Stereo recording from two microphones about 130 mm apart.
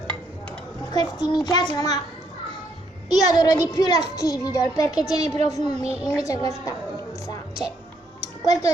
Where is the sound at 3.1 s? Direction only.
30° left (ahead or behind).